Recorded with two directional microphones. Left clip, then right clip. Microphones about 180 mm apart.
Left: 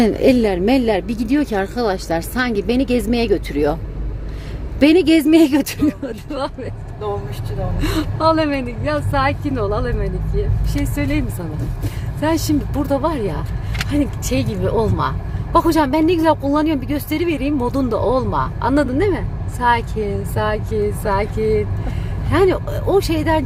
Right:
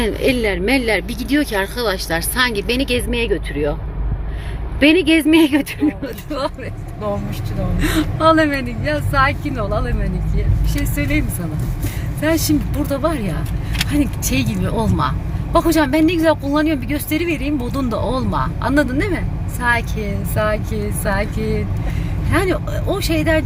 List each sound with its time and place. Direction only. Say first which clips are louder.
0.0 s speech: left 3 dB; 35° left (ahead or behind)
3.5 s speech: left 3 dB; 50° left (ahead or behind)
4.8 s speech: even; 30° left (ahead or behind)
7.8 s speech: right 2 dB; 10° left (ahead or behind)
12.2 s speech: right 1 dB; 15° left (ahead or behind)